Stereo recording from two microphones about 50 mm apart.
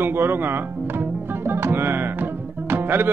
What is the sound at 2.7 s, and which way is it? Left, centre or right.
Music, right.